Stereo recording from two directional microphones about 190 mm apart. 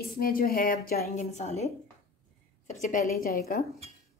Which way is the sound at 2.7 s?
40° left (ahead or behind).